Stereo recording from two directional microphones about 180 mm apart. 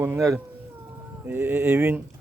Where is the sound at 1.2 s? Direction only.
10° right (ahead or behind).